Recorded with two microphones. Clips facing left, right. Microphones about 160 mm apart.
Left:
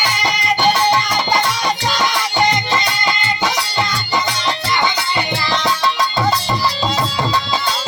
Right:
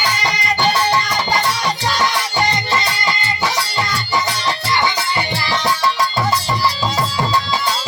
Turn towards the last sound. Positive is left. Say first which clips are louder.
# even
turn(degrees=20)  # may be behind; listen again after turning